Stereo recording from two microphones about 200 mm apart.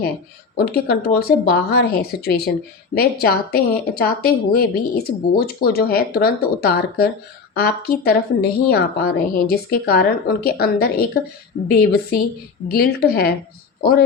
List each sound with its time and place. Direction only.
0.5 s a woman's voice: 50° left (ahead or behind)